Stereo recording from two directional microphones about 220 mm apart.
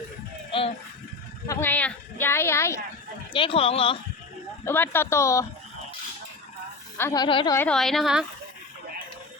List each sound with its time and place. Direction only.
0.5 s speech: 25° left (ahead or behind)
1.5 s a woman's voice: 10° left (ahead or behind)
3.3 s speech: 25° left (ahead or behind)
4.6 s a woman's voice: 10° left (ahead or behind)
6.9 s a woman's voice: 15° left (ahead or behind)